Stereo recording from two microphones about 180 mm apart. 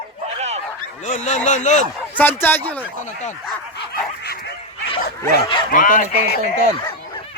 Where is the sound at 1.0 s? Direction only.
40° left (ahead or behind).